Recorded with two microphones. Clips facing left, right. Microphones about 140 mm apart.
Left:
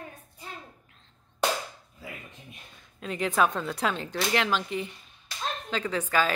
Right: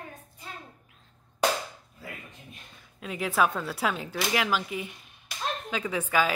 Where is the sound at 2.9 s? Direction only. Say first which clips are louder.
Left 1 dB; 5° right (ahead or behind).